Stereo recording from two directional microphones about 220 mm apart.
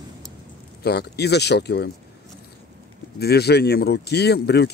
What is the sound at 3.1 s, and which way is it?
Speech, 45° left (ahead or behind).